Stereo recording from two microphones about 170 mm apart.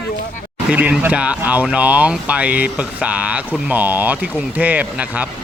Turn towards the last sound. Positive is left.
turn(degrees=-10)  # may be behind; listen again after turning